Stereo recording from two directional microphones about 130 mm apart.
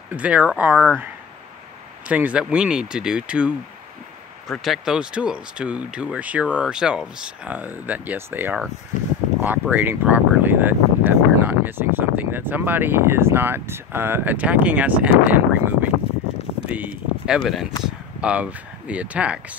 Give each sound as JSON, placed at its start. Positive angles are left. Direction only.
{"t": 0.1, "sound": "speech", "side_deg": -10}
{"t": 2.0, "sound": "speech", "side_deg": -10}